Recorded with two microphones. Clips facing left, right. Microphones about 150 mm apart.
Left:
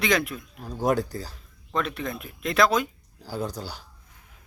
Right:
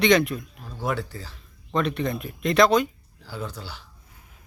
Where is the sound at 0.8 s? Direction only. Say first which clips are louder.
Left 4 dB; 40° left (ahead or behind).